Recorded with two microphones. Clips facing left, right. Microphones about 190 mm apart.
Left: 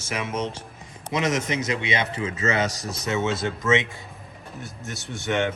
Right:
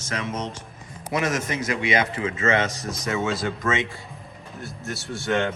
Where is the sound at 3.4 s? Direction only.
20° left (ahead or behind).